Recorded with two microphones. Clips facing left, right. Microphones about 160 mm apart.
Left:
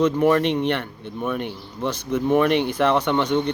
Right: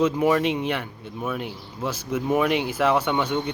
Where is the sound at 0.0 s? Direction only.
5° right (ahead or behind).